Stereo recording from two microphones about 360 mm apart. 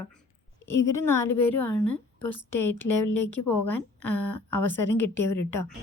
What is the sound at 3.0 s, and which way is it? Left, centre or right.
A woman's voice, left.